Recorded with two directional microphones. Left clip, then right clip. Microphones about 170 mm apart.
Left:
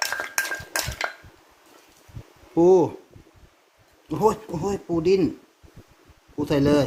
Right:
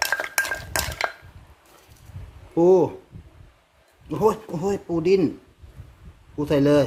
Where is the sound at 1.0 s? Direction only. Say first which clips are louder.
Right 3 dB; 20° right (ahead or behind).